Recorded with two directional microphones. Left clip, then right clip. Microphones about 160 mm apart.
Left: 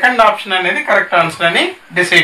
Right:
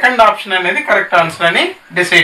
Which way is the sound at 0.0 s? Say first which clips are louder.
Right 1 dB; 20° left (ahead or behind).